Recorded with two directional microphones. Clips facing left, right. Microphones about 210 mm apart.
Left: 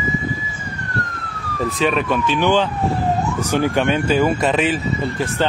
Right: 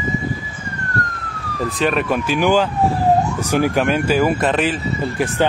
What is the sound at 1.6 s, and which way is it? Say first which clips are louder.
Speech: even; centre (ahead or behind).